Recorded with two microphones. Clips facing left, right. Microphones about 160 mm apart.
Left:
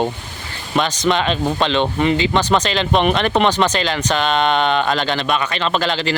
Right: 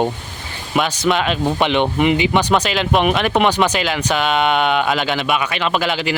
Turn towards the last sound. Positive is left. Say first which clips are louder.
# even
turn(degrees=-10)  # may be behind; listen again after turning